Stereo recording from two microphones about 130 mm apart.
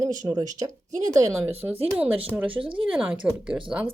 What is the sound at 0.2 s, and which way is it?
Speech, 30° right (ahead or behind).